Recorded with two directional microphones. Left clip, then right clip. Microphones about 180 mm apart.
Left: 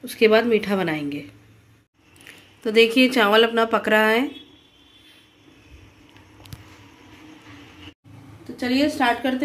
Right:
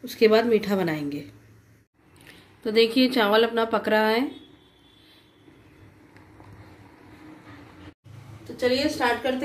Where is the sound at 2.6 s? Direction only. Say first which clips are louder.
Left 4 dB; 5° left (ahead or behind).